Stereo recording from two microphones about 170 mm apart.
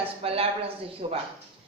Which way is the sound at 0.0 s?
35° right (ahead or behind).